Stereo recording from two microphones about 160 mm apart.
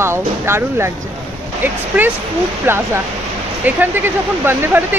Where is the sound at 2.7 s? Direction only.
15° right (ahead or behind).